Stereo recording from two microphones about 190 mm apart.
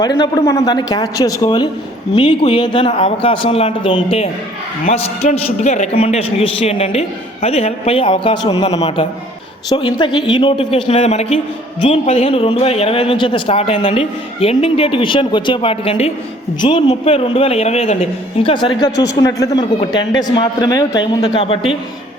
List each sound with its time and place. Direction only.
0.0 s a man's voice: 20° left (ahead or behind)